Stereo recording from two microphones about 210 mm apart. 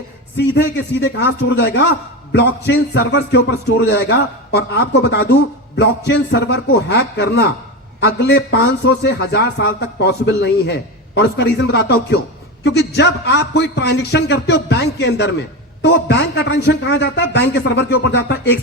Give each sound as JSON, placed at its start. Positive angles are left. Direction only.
{"t": 0.3, "sound": "a man's voice", "side_deg": 55}